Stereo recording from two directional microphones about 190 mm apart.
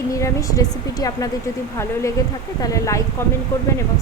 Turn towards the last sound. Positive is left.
turn(degrees=15)  # may be behind; listen again after turning